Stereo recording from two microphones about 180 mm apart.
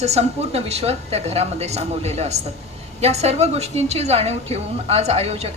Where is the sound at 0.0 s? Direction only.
35° right (ahead or behind).